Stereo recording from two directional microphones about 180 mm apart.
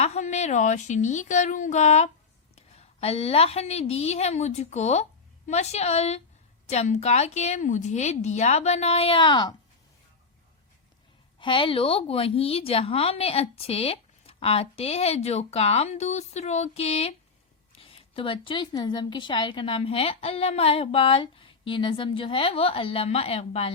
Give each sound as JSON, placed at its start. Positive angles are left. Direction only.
{"t": 0.0, "sound": "a woman's voice", "side_deg": 40}
{"t": 11.3, "sound": "a woman's voice", "side_deg": 25}